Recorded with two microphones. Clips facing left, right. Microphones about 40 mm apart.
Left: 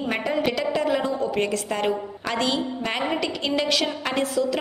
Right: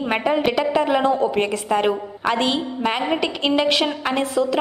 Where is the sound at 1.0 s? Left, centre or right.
Right.